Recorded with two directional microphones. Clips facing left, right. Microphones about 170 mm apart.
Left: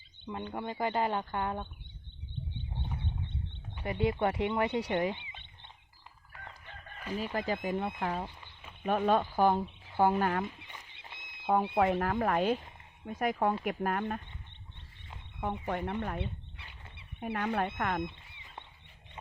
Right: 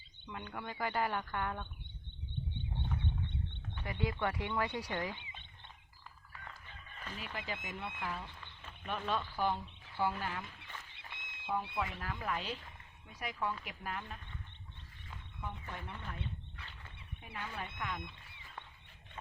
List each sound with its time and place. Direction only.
0.3 s speech: 25° left (ahead or behind)
3.8 s speech: 25° left (ahead or behind)
7.3 s speech: 40° left (ahead or behind)
10.7 s a sound: 15° left (ahead or behind)
11.1 s a sound: 40° left (ahead or behind)
11.5 s speech: 50° left (ahead or behind)
15.4 s speech: 60° left (ahead or behind)
16.2 s fowl: 15° left (ahead or behind)
17.2 s speech: 60° left (ahead or behind)